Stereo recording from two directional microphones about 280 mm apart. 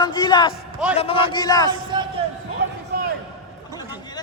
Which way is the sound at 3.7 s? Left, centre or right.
Centre.